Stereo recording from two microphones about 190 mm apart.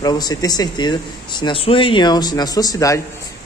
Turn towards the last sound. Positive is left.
turn(degrees=15)  # may be behind; listen again after turning